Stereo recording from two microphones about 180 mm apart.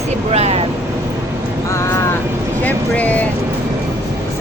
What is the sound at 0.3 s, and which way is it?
Speech, 35° right (ahead or behind).